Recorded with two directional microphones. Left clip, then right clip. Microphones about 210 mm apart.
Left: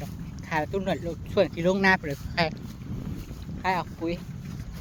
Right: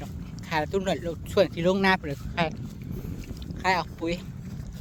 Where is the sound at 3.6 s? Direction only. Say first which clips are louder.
Right 2 dB; 35° right (ahead or behind).